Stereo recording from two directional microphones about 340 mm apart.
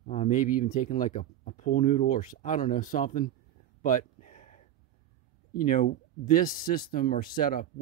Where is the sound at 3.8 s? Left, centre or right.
Left.